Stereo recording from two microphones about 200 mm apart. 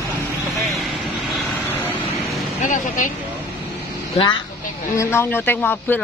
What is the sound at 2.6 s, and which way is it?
Speech, 40° left (ahead or behind).